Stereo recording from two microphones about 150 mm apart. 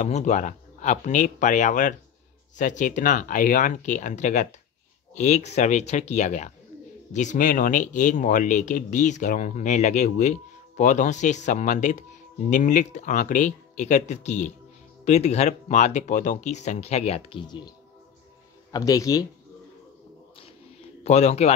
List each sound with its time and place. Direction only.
0.0 s speech: 55° left (ahead or behind); by 19.2 s 25° left (ahead or behind)
21.0 s a man's voice: 45° left (ahead or behind)